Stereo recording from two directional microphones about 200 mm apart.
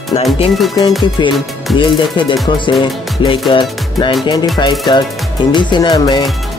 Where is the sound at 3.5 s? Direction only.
25° left (ahead or behind).